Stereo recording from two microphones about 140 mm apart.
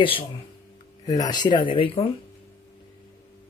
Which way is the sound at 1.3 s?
30° left (ahead or behind).